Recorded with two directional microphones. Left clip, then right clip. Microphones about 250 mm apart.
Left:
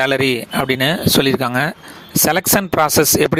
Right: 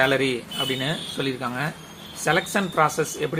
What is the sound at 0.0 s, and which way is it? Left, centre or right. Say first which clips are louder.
Speech: left 5 dB; left.